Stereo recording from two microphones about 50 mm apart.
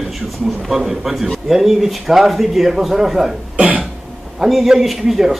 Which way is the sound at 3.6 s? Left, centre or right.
Right.